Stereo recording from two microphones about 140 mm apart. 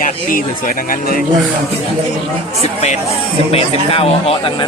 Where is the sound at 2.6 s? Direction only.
50° left (ahead or behind).